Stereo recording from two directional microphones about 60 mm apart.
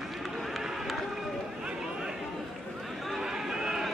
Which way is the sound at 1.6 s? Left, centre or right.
Centre.